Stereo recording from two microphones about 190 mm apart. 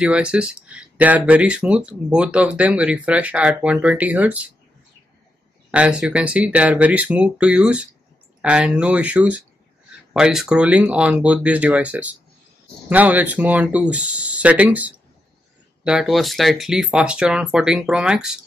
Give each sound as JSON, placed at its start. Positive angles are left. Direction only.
{"t": 0.0, "sound": "speech", "side_deg": -5}
{"t": 5.7, "sound": "speech", "side_deg": -5}